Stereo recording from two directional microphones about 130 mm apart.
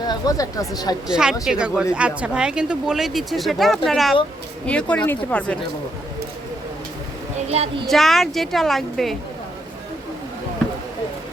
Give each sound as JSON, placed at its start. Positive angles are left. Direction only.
{"t": 0.0, "sound": "speech", "side_deg": 30}
{"t": 1.0, "sound": "speech", "side_deg": -5}
{"t": 7.5, "sound": "a child's voice", "side_deg": -50}
{"t": 7.9, "sound": "speech", "side_deg": 0}